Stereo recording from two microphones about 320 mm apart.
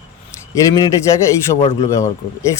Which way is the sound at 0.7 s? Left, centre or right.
Centre.